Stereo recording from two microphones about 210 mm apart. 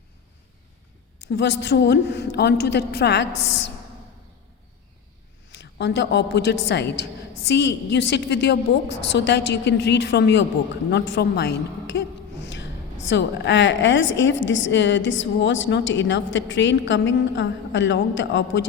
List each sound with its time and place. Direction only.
1.2 s a woman's voice: 55° left (ahead or behind)
5.5 s a woman's voice: 55° left (ahead or behind)